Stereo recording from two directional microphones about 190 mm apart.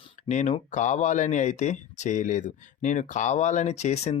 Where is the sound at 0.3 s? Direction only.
40° left (ahead or behind).